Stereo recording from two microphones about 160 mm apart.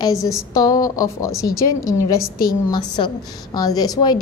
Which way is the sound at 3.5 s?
25° left (ahead or behind).